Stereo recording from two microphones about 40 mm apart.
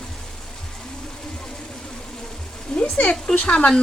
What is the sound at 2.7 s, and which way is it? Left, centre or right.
Speech, left.